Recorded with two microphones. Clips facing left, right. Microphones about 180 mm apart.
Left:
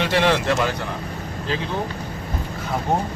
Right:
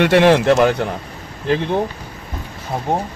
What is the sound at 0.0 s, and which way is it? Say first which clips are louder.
Speech: right 7 dB; 60° right (ahead or behind).